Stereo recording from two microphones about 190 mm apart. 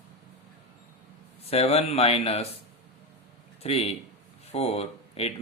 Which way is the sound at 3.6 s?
35° left (ahead or behind).